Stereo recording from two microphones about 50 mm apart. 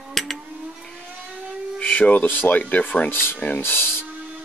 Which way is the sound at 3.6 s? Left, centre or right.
Left.